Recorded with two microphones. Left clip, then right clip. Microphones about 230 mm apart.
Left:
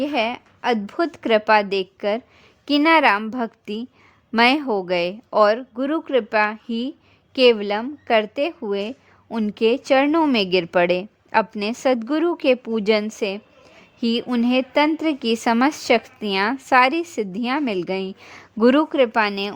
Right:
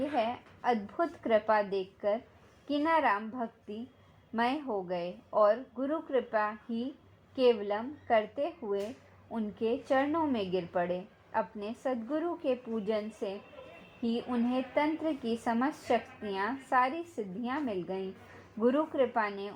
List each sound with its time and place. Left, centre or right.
0.6 s a woman's voice: left
15.4 s a woman's voice: left